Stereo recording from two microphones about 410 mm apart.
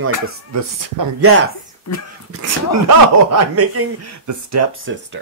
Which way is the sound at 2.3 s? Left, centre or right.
Right.